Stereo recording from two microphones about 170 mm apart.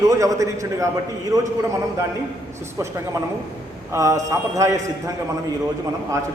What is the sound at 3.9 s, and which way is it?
Speech, 20° right (ahead or behind).